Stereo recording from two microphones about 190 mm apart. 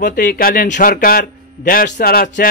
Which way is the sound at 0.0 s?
45° left (ahead or behind).